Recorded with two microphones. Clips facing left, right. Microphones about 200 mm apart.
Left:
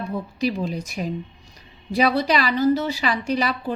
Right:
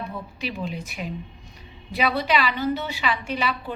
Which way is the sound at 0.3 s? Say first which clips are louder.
Left 7 dB; 40° left (ahead or behind).